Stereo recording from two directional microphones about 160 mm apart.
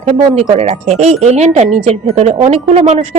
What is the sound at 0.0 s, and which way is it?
Speech, 45° right (ahead or behind).